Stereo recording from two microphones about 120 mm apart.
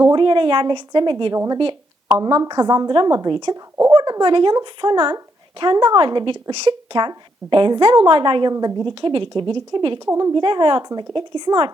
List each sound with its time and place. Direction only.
0.0 s speech: 40° right (ahead or behind)
1.5 s a sound: 45° right (ahead or behind)
2.1 s speech: 30° right (ahead or behind)
3.5 s speech: 25° right (ahead or behind)
3.9 s speech: 40° right (ahead or behind)
10.1 s a woman's voice: 25° right (ahead or behind)
10.3 s speech: 40° right (ahead or behind)